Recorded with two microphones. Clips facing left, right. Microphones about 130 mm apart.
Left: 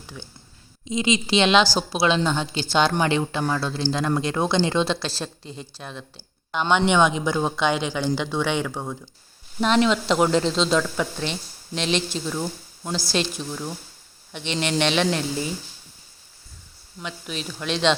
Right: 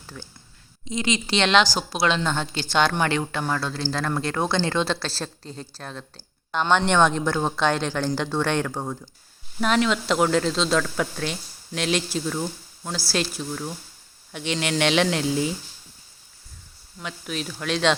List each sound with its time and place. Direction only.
0.9 s a woman's voice: 20° left (ahead or behind)
1.6 s speech: 15° right (ahead or behind)
2.0 s a woman's voice: 20° left (ahead or behind); by 8.7 s 5° left (ahead or behind)
8.7 s speech: 10° right (ahead or behind)
12.3 s speech: 5° left (ahead or behind); by 15.4 s 10° right (ahead or behind)
17.0 s speech: centre (ahead or behind)